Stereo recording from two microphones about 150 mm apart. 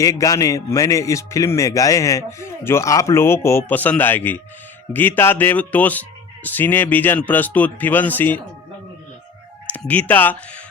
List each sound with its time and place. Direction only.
0.0 s a man's voice: 20° left (ahead or behind)
9.6 s speech: 10° left (ahead or behind)